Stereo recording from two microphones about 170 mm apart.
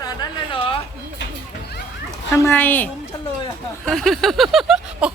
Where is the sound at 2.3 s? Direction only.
15° left (ahead or behind).